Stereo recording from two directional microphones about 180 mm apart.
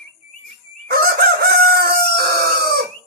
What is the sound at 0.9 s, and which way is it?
Chicken, 60° right (ahead or behind).